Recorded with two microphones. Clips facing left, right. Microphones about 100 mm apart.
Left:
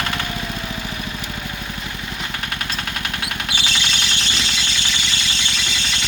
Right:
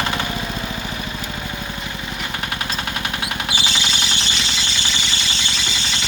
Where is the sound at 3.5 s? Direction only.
5° right (ahead or behind).